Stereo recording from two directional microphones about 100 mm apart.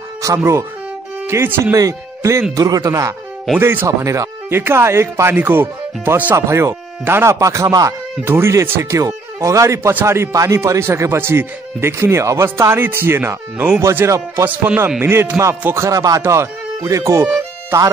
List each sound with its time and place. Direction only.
0.4 s speech: 30° right (ahead or behind)